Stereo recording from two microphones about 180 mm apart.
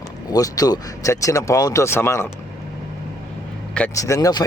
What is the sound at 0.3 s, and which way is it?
Speech, 20° left (ahead or behind).